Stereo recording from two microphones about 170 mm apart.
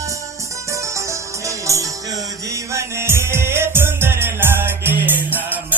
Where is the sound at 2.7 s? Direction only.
15° right (ahead or behind).